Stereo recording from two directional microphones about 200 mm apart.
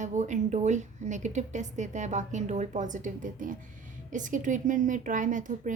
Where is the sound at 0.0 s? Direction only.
35° right (ahead or behind).